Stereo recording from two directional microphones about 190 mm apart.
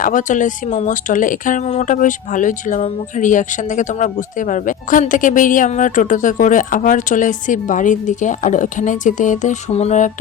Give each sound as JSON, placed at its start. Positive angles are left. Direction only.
{"t": 0.0, "sound": "speech", "side_deg": 40}